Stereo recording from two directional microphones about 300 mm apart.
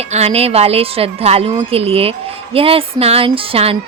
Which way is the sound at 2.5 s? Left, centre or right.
Centre.